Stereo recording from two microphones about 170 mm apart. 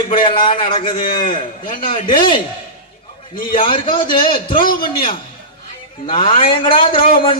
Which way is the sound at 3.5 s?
30° left (ahead or behind).